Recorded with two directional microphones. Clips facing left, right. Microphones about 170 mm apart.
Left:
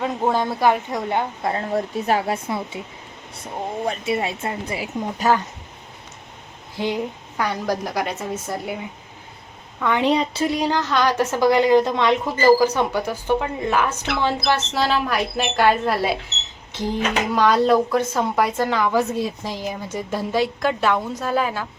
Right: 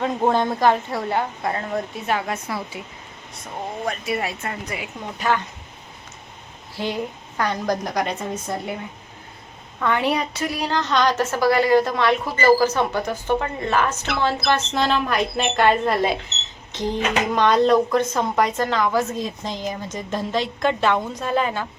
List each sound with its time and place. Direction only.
0.3 s a woman's voice: 5° left (ahead or behind); by 1.8 s 25° left (ahead or behind)
1.9 s speech: 40° left (ahead or behind)
6.7 s a woman's voice: 15° left (ahead or behind)
9.8 s a woman's voice: 15° left (ahead or behind)
17.3 s a woman's voice: 5° left (ahead or behind)